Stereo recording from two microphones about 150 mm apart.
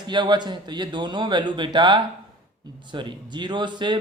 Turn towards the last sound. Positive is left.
turn(degrees=-30)  # may be behind; listen again after turning